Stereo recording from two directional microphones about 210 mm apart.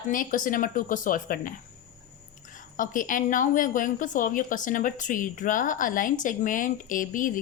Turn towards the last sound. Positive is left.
turn(degrees=40)  # may be behind; listen again after turning